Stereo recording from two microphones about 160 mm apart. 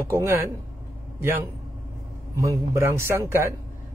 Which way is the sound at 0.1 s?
15° right (ahead or behind).